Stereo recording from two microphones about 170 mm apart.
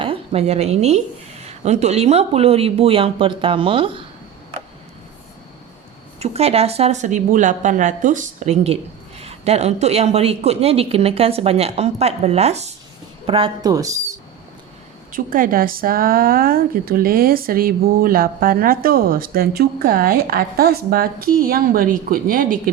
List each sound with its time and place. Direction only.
0.0 s a woman's voice: 35° right (ahead or behind)
6.1 s speech: 40° right (ahead or behind); by 14.2 s 20° right (ahead or behind)
15.1 s a woman's voice: 55° right (ahead or behind)